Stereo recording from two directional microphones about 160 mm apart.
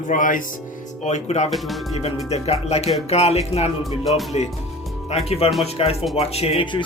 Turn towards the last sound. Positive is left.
turn(degrees=30)  # may be behind; listen again after turning